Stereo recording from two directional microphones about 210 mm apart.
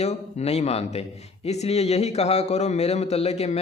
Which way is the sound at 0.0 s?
30° left (ahead or behind).